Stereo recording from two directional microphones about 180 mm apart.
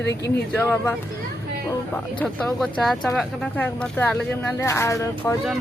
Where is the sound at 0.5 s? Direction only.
10° left (ahead or behind).